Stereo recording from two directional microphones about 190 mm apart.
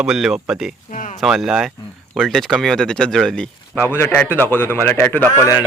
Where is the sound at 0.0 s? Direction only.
5° right (ahead or behind).